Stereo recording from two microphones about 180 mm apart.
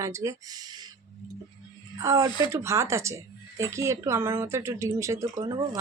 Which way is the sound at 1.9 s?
20° right (ahead or behind).